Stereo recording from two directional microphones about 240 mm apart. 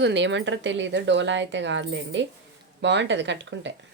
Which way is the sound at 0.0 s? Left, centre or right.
Right.